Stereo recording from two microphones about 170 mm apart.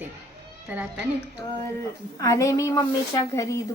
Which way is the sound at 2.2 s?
20° left (ahead or behind).